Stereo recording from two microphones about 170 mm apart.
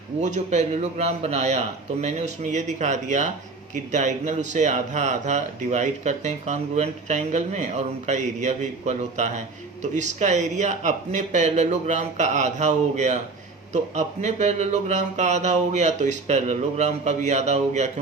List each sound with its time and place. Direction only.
0.2 s speech: 45° right (ahead or behind)